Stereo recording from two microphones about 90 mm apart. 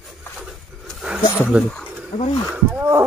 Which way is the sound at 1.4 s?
10° right (ahead or behind).